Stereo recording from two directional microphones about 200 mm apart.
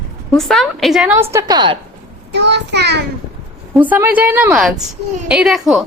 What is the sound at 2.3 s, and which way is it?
Speech, 60° right (ahead or behind).